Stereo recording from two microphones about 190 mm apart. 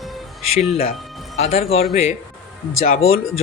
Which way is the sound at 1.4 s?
35° left (ahead or behind).